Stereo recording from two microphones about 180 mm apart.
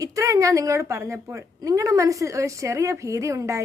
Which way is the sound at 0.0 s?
20° right (ahead or behind).